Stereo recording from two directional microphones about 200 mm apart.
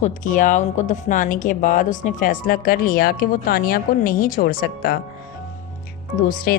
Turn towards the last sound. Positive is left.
turn(degrees=45)  # may be behind; listen again after turning